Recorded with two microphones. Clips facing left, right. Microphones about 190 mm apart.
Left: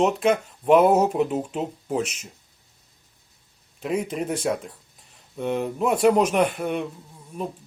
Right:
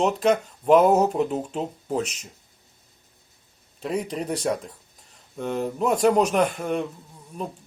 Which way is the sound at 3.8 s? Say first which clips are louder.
Left 1 dB; 5° left (ahead or behind).